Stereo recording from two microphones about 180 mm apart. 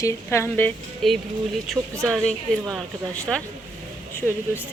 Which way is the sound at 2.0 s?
Centre (ahead or behind).